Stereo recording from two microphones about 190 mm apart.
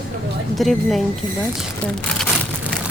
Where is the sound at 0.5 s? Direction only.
Centre (ahead or behind).